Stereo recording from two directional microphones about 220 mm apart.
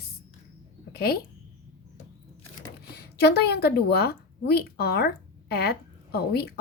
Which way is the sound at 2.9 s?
45° left (ahead or behind).